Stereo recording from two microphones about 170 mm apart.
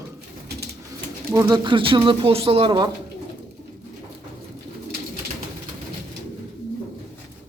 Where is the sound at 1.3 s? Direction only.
20° right (ahead or behind).